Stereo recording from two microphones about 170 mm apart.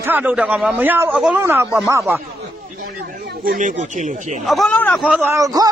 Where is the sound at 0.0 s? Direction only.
10° right (ahead or behind).